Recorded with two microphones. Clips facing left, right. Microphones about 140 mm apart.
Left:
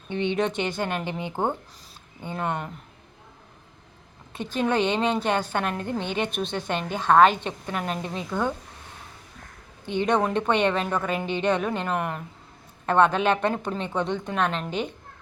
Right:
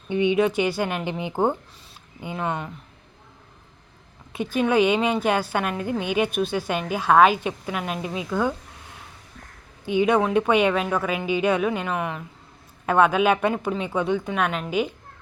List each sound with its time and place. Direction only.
0.1 s a woman's voice: 10° right (ahead or behind)
4.3 s a woman's voice: 10° right (ahead or behind)
9.8 s a woman's voice: 10° right (ahead or behind)